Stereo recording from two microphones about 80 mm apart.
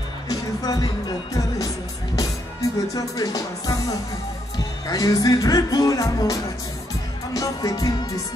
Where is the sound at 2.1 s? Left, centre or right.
Left.